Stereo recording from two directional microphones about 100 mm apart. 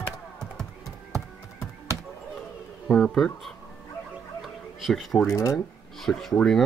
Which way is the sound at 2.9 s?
5° left (ahead or behind).